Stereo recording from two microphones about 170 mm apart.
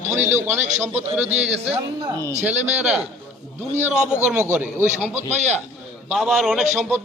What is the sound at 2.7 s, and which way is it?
Speech, 10° right (ahead or behind).